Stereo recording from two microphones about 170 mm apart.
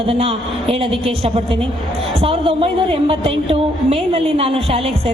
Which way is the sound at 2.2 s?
30° right (ahead or behind).